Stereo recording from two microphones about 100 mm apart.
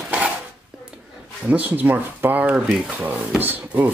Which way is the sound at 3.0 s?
15° right (ahead or behind).